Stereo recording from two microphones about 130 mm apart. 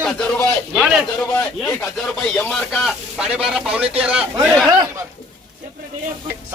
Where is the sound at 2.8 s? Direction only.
5° right (ahead or behind).